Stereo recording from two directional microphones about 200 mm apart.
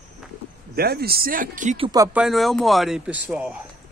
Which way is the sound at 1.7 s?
20° right (ahead or behind).